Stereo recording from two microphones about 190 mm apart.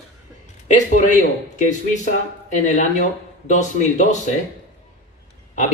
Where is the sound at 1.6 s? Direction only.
40° left (ahead or behind).